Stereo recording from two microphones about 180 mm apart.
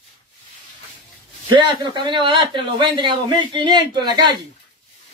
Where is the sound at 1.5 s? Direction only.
25° right (ahead or behind).